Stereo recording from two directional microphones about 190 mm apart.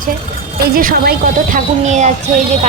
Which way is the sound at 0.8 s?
50° right (ahead or behind).